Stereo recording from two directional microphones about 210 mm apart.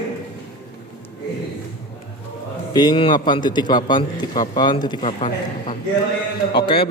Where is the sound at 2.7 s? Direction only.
20° left (ahead or behind).